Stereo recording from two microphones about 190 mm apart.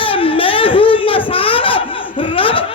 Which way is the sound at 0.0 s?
30° left (ahead or behind).